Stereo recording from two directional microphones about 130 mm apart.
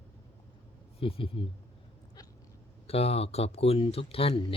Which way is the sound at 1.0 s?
45° left (ahead or behind).